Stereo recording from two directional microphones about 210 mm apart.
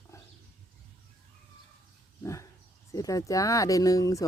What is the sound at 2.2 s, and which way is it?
Dog, 15° left (ahead or behind).